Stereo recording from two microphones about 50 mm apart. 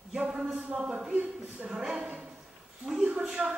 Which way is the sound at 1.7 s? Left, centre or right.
Centre.